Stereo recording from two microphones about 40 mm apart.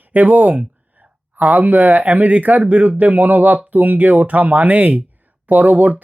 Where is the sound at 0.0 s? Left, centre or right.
Right.